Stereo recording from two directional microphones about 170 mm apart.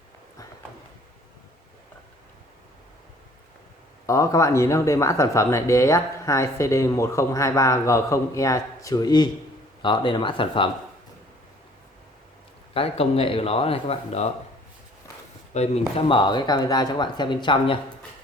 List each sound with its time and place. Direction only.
4.0 s speech: 20° left (ahead or behind)
12.7 s speech: 35° left (ahead or behind)
15.5 s speech: 40° left (ahead or behind)
16.0 s speech: 30° left (ahead or behind)